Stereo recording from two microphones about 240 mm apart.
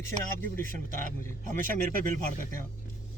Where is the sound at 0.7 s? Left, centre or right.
Right.